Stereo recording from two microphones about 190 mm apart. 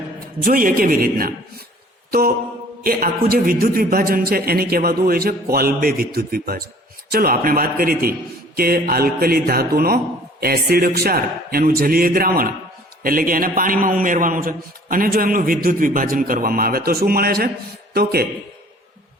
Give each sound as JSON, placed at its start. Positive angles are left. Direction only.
{"t": 0.4, "sound": "a man's voice", "side_deg": -50}
{"t": 2.0, "sound": "mantra", "side_deg": -50}
{"t": 2.8, "sound": "a man's voice", "side_deg": -50}